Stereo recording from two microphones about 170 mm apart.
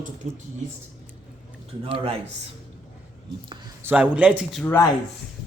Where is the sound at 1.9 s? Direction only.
35° right (ahead or behind).